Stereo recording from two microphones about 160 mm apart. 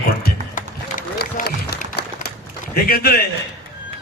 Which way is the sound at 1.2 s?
80° left.